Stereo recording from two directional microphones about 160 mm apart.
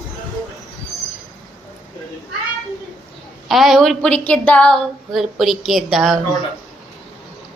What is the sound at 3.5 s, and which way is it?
A woman's voice, centre (ahead or behind).